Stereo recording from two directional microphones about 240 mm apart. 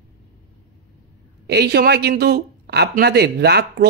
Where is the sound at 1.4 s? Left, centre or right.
Right.